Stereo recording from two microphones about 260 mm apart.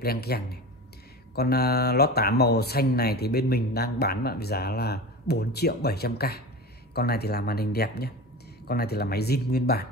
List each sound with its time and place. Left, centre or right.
0.0 s speech: left